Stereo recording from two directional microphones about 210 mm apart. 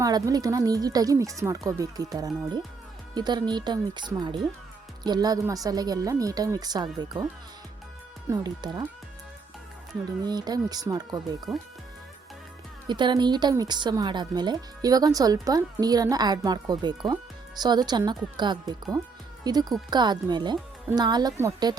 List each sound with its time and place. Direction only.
0.0 s a woman's voice: 15° right (ahead or behind)
8.3 s speech: 20° right (ahead or behind)
10.2 s speech: 20° right (ahead or behind)
12.9 s speech: 20° right (ahead or behind)